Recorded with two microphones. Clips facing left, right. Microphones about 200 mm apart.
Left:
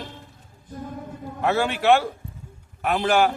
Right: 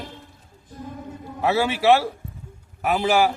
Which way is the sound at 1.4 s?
5° right (ahead or behind).